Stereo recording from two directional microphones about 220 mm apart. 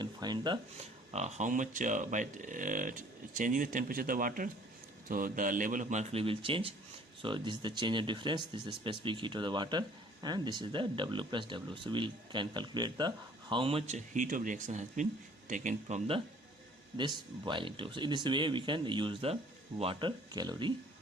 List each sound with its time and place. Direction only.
0.0 s speech: 20° right (ahead or behind)